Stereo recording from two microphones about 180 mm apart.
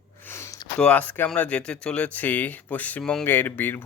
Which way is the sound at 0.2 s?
15° left (ahead or behind).